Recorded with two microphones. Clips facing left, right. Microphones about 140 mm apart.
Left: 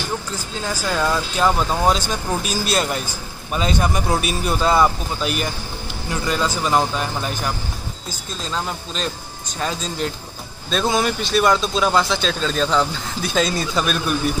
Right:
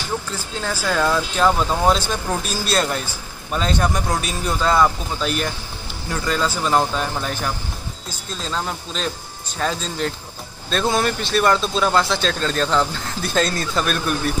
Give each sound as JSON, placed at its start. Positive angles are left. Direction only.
{"t": 0.6, "sound": "speech", "side_deg": 5}
{"t": 8.5, "sound": "speech", "side_deg": 0}